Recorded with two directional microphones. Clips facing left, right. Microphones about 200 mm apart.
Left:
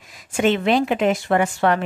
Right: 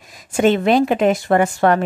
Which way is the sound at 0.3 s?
45° right (ahead or behind).